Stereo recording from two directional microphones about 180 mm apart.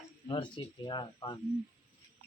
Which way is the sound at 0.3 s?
25° left (ahead or behind).